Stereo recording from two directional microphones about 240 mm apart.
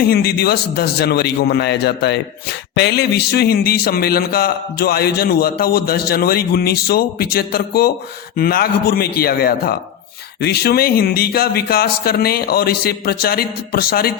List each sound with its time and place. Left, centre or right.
0.1 s a man's voice: left